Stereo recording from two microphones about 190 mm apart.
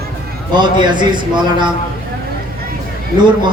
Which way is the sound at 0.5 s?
25° right (ahead or behind).